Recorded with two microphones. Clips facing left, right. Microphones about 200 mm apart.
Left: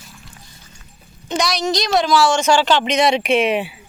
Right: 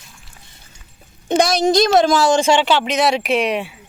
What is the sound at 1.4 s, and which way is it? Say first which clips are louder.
Speech: right 6 dB; 50° right (ahead or behind).